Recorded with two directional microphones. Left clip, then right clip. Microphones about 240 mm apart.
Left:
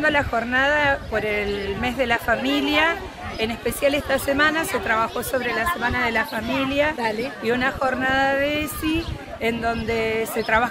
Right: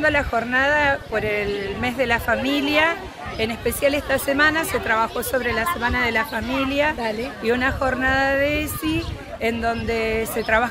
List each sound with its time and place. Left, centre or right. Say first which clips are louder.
0.0 s speech: right 1 dB; centre
7.0 s speech: left 1 dB; centre
7.4 s speech: right 1 dB; centre